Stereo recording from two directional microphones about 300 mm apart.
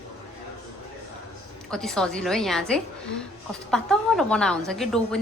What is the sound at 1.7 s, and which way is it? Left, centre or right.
A woman's voice, centre.